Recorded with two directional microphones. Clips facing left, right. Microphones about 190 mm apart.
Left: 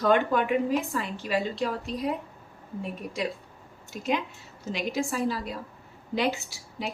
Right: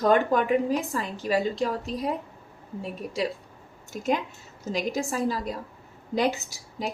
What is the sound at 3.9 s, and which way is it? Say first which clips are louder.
A woman's voice: right 2 dB; 45° right (ahead or behind).